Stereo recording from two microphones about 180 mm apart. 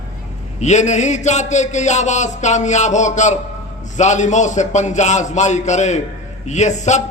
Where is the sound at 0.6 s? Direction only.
40° left (ahead or behind).